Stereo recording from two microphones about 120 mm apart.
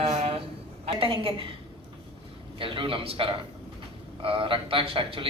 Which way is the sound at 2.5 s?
45° right (ahead or behind).